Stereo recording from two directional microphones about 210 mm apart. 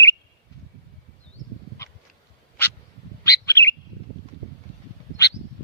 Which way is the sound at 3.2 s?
15° left (ahead or behind).